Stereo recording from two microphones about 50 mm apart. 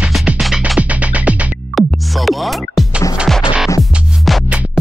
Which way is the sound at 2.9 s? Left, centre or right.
Right.